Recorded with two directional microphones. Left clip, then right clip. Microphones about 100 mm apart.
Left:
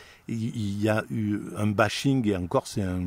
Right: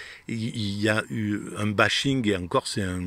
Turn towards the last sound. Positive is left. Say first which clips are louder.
# right 1 dB
turn(degrees=45)  # may be behind; listen again after turning